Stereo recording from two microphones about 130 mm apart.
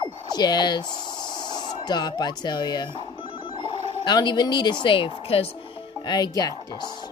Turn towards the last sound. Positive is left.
turn(degrees=30)  # may be behind; listen again after turning